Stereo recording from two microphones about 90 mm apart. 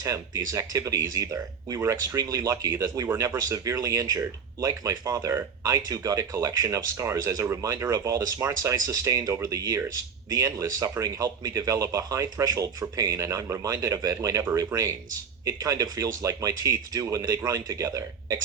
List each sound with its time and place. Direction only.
0.0 s speech: 40° right (ahead or behind)